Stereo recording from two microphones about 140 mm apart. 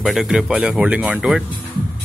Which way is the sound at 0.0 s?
Centre (ahead or behind).